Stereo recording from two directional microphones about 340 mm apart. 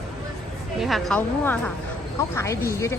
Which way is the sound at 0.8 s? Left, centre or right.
Centre.